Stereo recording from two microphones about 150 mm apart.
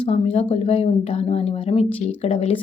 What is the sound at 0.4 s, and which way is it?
A woman's voice, 40° left (ahead or behind).